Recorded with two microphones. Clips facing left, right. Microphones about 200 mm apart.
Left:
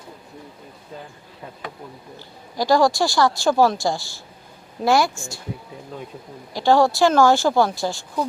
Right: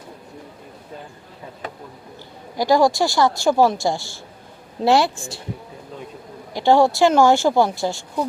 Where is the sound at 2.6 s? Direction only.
20° right (ahead or behind).